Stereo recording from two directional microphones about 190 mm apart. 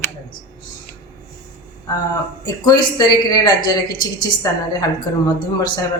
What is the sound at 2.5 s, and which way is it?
Speech, 20° left (ahead or behind).